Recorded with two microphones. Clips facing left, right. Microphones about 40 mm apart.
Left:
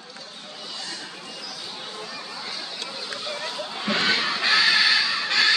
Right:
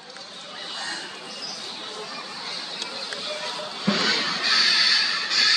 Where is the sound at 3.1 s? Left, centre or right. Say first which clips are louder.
Left 1 dB; centre.